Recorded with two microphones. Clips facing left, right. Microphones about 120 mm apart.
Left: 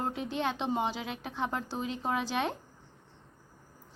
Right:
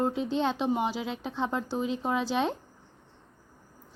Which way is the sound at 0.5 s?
20° left (ahead or behind).